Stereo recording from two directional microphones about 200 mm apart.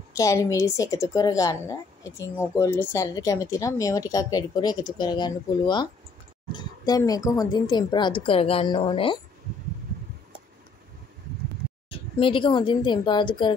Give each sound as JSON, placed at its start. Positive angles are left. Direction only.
{"t": 0.1, "sound": "speech", "side_deg": 15}
{"t": 11.9, "sound": "speech", "side_deg": 25}